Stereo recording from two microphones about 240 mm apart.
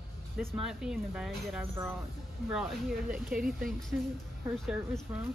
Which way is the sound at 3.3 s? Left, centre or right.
Centre.